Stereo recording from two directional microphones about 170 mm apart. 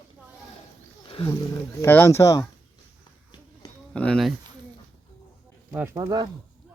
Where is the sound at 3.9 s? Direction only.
5° left (ahead or behind).